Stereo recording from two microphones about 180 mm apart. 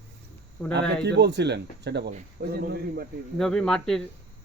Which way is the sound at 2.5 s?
60° right (ahead or behind).